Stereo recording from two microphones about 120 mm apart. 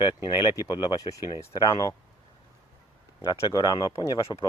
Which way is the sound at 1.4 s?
25° left (ahead or behind).